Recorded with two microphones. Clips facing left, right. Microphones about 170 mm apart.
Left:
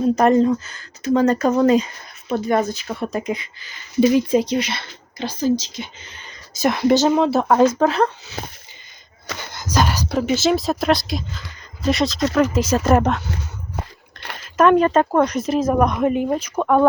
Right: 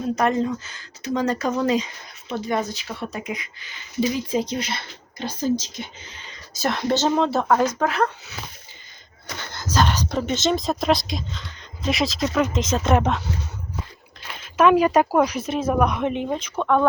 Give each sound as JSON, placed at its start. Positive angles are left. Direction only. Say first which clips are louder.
{"t": 0.2, "sound": "speech", "louder": "left 6 dB", "side_deg": 40}
{"t": 3.3, "sound": "speech", "louder": "left 2 dB", "side_deg": 30}
{"t": 4.1, "sound": "speech", "louder": "left 7 dB", "side_deg": 65}
{"t": 6.5, "sound": "a woman's voice", "louder": "left 6 dB", "side_deg": 15}
{"t": 9.4, "sound": "speech", "louder": "left 1 dB", "side_deg": 15}
{"t": 13.7, "sound": "biting", "louder": "left 3 dB", "side_deg": 65}
{"t": 14.3, "sound": "speech", "louder": "left 2 dB", "side_deg": -5}